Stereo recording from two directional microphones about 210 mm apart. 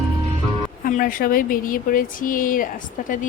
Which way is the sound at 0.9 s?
40° left (ahead or behind).